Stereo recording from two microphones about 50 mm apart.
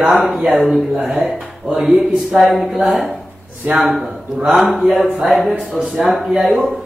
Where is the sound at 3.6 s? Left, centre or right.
Right.